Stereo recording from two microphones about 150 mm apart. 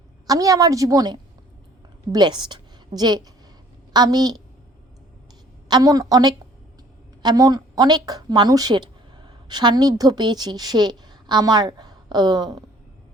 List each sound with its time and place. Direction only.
0.3 s a woman's voice: 25° right (ahead or behind)
5.6 s a woman's voice: 25° right (ahead or behind)